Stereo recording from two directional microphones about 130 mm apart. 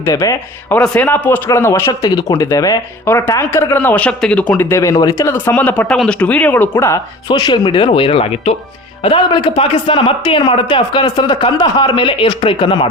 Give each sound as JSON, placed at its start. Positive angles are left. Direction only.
{"t": 0.0, "sound": "speech", "side_deg": 25}
{"t": 0.7, "sound": "speech", "side_deg": 10}
{"t": 1.9, "sound": "speech", "side_deg": 30}
{"t": 7.3, "sound": "speech", "side_deg": 35}
{"t": 9.0, "sound": "speech", "side_deg": 40}